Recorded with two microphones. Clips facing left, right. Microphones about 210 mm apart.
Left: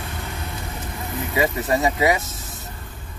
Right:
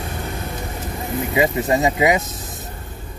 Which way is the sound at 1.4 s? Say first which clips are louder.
Right 3 dB; 20° right (ahead or behind).